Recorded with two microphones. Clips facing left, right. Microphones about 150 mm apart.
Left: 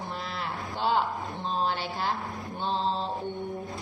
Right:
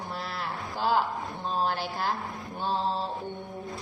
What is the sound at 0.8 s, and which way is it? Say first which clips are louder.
A woman's voice: even; 5° right (ahead or behind).